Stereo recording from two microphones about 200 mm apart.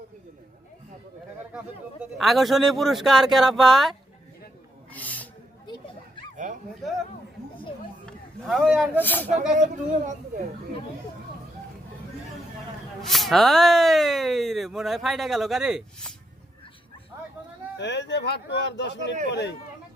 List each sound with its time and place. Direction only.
1.5 s speech: centre (ahead or behind)
4.9 s snake: 10° left (ahead or behind)
5.6 s children playing: 20° left (ahead or behind)
6.3 s bow-wow: 40° right (ahead or behind)
8.0 s a sound: centre (ahead or behind)
9.0 s speech: 10° left (ahead or behind)
9.6 s speech: 40° right (ahead or behind)
13.0 s speech: centre (ahead or behind)
17.7 s speech: 60° left (ahead or behind)